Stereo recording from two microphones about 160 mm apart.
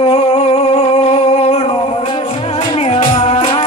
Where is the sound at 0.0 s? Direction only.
40° left (ahead or behind).